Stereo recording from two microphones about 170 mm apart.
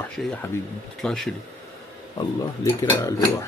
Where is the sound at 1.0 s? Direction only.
5° left (ahead or behind).